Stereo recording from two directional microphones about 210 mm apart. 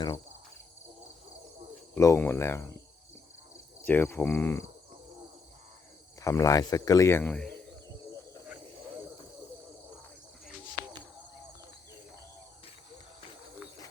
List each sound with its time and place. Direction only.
2.0 s speech: 15° left (ahead or behind)
3.8 s speech: 10° left (ahead or behind)
6.1 s speech: 15° left (ahead or behind)